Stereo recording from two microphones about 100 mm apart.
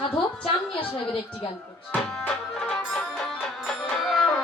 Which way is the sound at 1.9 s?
10° left (ahead or behind).